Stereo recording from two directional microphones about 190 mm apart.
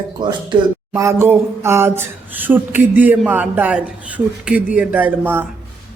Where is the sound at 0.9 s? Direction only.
15° right (ahead or behind).